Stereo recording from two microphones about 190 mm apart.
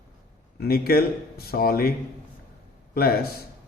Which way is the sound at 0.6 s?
55° left (ahead or behind).